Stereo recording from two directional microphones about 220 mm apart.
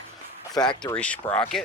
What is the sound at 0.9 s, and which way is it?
Speech, 5° left (ahead or behind).